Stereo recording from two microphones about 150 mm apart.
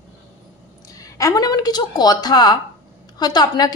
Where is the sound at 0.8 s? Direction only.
20° left (ahead or behind).